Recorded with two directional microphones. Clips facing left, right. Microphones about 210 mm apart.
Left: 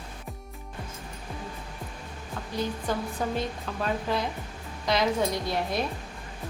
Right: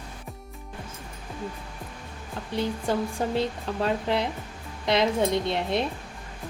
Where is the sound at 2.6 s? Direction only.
25° right (ahead or behind).